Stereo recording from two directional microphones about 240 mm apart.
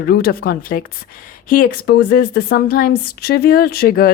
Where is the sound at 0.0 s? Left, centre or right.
Left.